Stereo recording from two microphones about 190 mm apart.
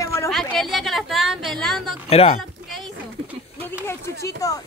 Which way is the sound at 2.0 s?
30° left (ahead or behind).